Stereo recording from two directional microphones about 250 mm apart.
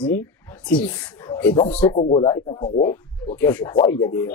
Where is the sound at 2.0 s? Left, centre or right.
Left.